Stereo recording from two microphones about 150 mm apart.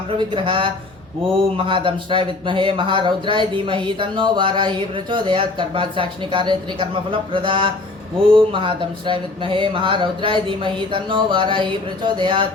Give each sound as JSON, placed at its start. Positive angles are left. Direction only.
{"t": 0.2, "sound": "speech", "side_deg": -35}